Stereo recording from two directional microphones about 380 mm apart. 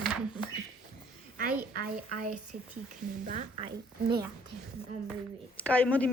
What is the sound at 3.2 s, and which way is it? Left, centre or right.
Speech, centre.